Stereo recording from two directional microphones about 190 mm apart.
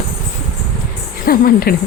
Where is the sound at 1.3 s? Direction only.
50° left (ahead or behind).